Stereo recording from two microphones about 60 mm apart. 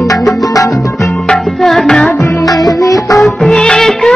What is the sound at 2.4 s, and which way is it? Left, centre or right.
Music, left.